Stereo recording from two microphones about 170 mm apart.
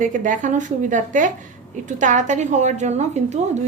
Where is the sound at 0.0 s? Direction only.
50° right (ahead or behind).